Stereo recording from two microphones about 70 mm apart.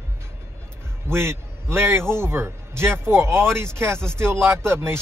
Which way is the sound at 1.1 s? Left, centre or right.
Right.